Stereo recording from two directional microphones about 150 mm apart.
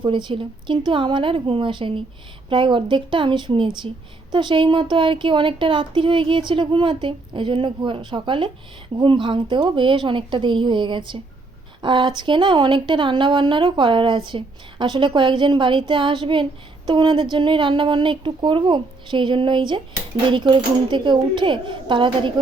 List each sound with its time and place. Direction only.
0.0 s speech: 30° right (ahead or behind)